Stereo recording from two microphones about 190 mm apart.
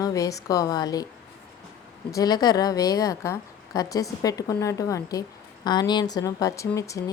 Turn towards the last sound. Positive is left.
turn(degrees=15)  # may be behind; listen again after turning